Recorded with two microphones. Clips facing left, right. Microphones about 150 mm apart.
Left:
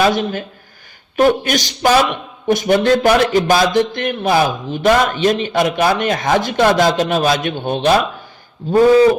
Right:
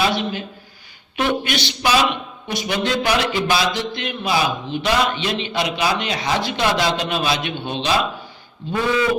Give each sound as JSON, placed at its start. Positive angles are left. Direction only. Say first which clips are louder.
{"t": 0.0, "sound": "a man's voice", "louder": "left 5 dB", "side_deg": 45}
{"t": 8.7, "sound": "a man's voice", "louder": "left 10 dB", "side_deg": 40}